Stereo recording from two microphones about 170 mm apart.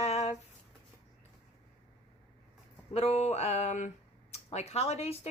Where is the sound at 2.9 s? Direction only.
35° left (ahead or behind).